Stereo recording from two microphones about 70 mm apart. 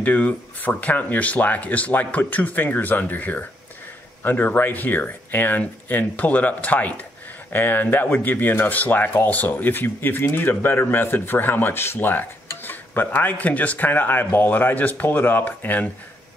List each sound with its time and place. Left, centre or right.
0.0 s speech: left